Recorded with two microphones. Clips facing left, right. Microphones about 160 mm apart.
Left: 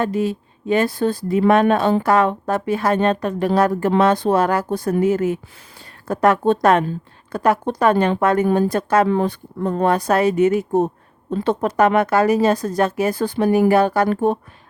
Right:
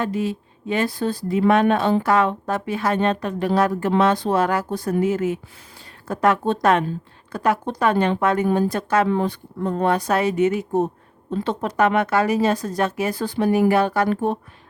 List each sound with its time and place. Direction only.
0.0 s a woman's voice: 45° left (ahead or behind)